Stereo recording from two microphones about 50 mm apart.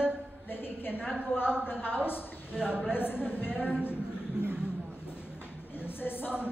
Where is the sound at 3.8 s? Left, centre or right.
Left.